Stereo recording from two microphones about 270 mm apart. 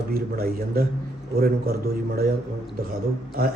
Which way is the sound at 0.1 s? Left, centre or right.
Right.